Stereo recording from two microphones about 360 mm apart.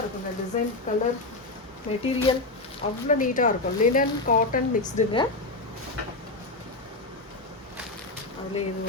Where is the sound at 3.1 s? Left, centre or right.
Left.